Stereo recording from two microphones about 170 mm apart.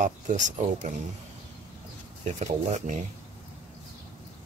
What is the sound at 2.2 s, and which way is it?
Speech, 45° right (ahead or behind).